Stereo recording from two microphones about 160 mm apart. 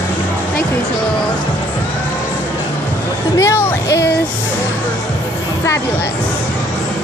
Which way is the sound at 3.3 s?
15° left (ahead or behind).